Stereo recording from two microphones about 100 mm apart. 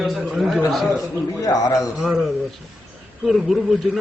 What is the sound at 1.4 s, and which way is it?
Speech, 40° left (ahead or behind).